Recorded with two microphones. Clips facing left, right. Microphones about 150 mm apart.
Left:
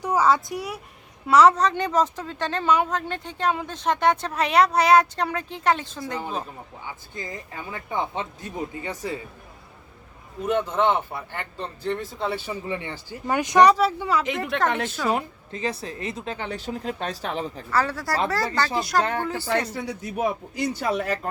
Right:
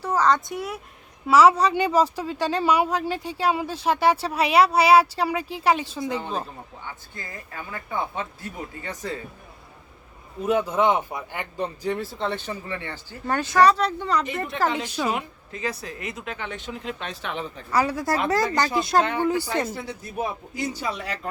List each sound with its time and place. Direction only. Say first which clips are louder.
0.0 s speech: left 1 dB; 10° left (ahead or behind); by 6.1 s 10° right (ahead or behind)
6.1 s a woman's voice: right 1 dB; 5° left (ahead or behind)
6.8 s speech: left 5 dB; 15° left (ahead or behind)
10.4 s speech: right 1 dB; 5° right (ahead or behind)
12.2 s a woman's voice: left 1 dB; 5° left (ahead or behind)
12.6 s speech: left 3 dB; 15° left (ahead or behind)
14.5 s speech: left 1 dB; 70° left (ahead or behind)
14.8 s speech: even; 15° right (ahead or behind)
15.1 s a woman's voice: left 3 dB; 30° left (ahead or behind)
17.7 s speech: right 3 dB; 15° right (ahead or behind)
19.2 s speech: right 6 dB; 15° right (ahead or behind)
19.5 s speech: left 2 dB; 90° left
20.7 s speech: left 5 dB; 55° left (ahead or behind)